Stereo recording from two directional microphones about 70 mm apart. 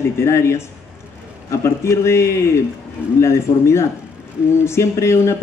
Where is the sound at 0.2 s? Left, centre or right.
Left.